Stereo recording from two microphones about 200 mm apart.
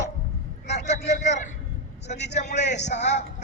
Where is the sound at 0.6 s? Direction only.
60° left (ahead or behind).